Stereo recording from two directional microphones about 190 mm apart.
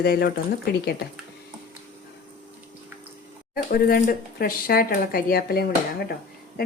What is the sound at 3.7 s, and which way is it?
Speech, 55° left (ahead or behind).